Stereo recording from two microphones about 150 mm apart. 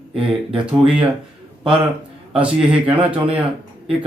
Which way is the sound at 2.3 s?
5° right (ahead or behind).